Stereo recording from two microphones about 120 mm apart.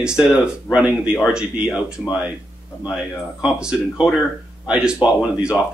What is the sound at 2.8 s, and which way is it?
Speech, 5° right (ahead or behind).